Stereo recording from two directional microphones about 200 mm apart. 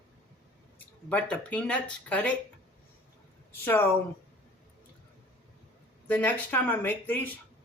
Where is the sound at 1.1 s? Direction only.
5° left (ahead or behind).